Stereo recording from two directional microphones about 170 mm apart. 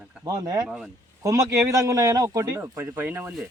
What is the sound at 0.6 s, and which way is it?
Speech, centre (ahead or behind).